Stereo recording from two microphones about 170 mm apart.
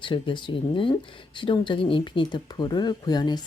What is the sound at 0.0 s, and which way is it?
Speech, 30° left (ahead or behind).